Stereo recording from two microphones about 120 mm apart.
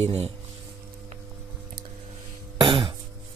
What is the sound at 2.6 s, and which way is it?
Cough, 45° right (ahead or behind).